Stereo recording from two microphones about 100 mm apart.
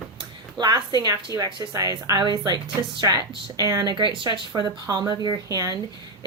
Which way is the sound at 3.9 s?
50° right (ahead or behind).